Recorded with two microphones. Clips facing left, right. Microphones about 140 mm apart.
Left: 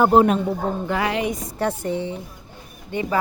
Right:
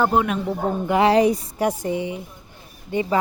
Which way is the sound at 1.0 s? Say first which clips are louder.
Right 7 dB; 35° right (ahead or behind).